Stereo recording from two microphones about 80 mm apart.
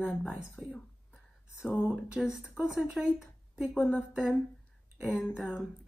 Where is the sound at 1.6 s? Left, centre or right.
Centre.